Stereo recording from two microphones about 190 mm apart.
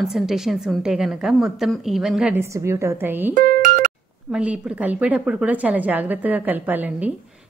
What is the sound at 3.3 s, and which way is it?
Music, 50° right (ahead or behind).